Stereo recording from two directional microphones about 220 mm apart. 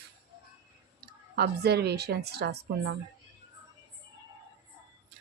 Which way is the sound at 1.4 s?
45° right (ahead or behind).